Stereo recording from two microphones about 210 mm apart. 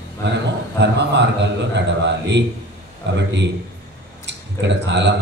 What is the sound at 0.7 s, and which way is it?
Speech, 55° right (ahead or behind).